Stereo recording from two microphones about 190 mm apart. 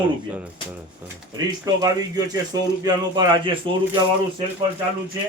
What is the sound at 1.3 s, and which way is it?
Speech, 20° right (ahead or behind).